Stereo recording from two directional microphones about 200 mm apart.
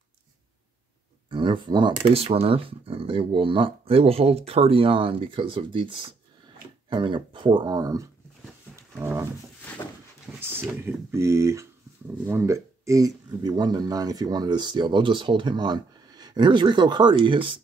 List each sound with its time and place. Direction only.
1.3 s speech: 25° right (ahead or behind)
10.4 s speech: 10° right (ahead or behind)